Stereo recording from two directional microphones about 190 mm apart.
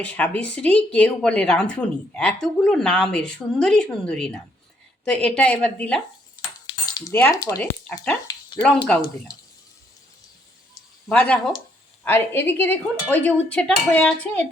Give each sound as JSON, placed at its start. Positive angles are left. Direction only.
{"t": 0.0, "sound": "a woman's voice", "side_deg": 5}
{"t": 6.7, "sound": "cutlery", "side_deg": 20}
{"t": 7.2, "sound": "a woman's voice", "side_deg": 20}
{"t": 8.5, "sound": "a woman's voice", "side_deg": 5}
{"t": 11.1, "sound": "a woman's voice", "side_deg": 5}